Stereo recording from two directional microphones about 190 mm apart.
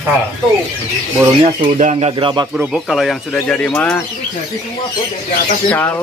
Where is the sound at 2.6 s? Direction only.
5° right (ahead or behind).